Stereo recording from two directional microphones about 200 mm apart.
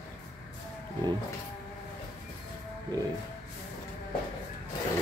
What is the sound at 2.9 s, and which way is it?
Speech, 20° right (ahead or behind).